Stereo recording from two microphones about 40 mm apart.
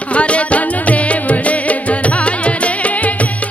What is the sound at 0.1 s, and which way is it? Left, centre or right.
Music, left.